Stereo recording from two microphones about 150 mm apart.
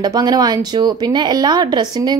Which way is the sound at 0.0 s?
25° right (ahead or behind).